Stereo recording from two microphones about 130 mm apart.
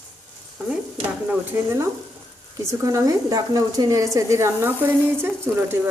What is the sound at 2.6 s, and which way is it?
Speech, 25° right (ahead or behind).